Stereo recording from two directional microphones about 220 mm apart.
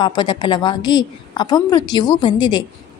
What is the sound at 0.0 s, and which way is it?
A woman's voice, 20° left (ahead or behind).